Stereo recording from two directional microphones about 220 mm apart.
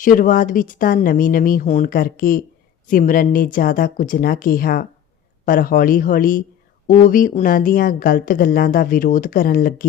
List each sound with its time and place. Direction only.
0.0 s a woman's voice: 40° left (ahead or behind)